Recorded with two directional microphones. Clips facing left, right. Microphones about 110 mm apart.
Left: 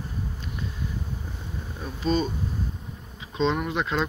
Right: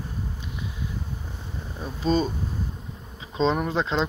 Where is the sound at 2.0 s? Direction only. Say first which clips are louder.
Right 2 dB; 40° right (ahead or behind).